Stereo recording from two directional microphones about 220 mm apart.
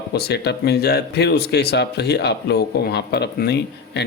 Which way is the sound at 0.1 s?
45° left (ahead or behind).